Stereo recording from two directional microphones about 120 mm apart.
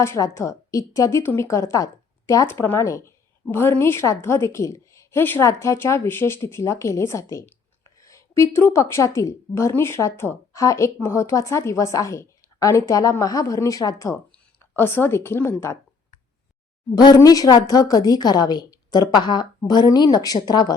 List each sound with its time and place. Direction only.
0.0 s a woman's voice: 25° left (ahead or behind)
14.8 s a woman's voice: 20° left (ahead or behind)
16.9 s a woman's voice: 35° left (ahead or behind)